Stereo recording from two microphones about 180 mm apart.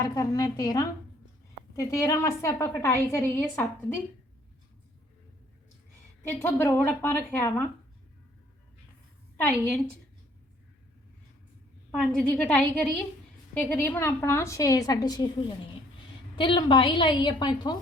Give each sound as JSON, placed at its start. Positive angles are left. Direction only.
{"t": 0.0, "sound": "a woman's voice", "side_deg": 20}
{"t": 6.2, "sound": "a woman's voice", "side_deg": 10}
{"t": 11.9, "sound": "a woman's voice", "side_deg": 10}